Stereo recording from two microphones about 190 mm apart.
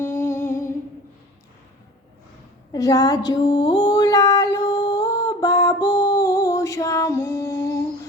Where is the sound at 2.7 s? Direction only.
20° left (ahead or behind).